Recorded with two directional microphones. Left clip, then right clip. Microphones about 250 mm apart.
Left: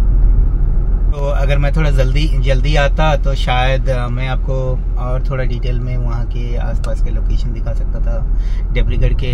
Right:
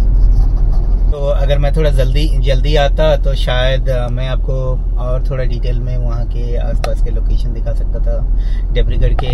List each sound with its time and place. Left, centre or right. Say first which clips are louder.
1.2 s speech: right 3 dB; centre
8.7 s speech: right 3 dB; centre